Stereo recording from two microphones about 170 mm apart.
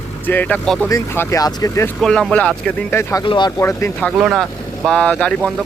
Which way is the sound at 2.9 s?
25° left (ahead or behind).